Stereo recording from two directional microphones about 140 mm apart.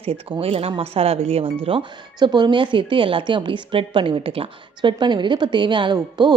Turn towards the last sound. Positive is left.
turn(degrees=-30)  # may be behind; listen again after turning